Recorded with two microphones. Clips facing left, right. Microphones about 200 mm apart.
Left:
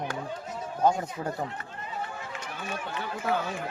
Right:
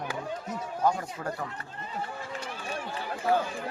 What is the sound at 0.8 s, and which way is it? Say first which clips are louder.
Speech: left 3 dB; 20° left (ahead or behind).